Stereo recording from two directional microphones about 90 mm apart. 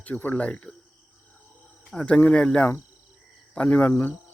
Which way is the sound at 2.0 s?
10° left (ahead or behind).